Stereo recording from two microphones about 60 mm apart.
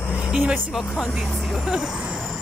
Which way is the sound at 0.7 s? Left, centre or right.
Centre.